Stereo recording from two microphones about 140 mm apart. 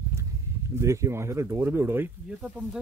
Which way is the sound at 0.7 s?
20° right (ahead or behind).